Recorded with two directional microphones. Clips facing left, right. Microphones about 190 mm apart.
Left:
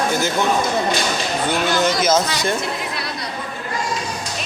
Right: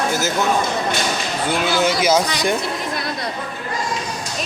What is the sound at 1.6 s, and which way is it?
Speech, 5° right (ahead or behind).